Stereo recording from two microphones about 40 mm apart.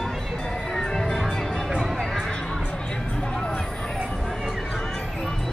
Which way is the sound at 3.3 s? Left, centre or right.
Centre.